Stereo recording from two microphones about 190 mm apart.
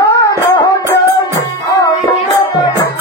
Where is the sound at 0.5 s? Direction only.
15° left (ahead or behind).